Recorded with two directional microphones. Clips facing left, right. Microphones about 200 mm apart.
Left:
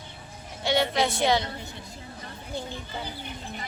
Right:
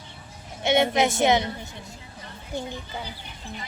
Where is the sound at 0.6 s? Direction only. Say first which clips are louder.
Right 4 dB; 20° right (ahead or behind).